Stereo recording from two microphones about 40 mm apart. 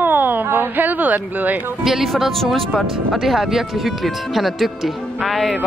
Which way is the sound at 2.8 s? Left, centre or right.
Centre.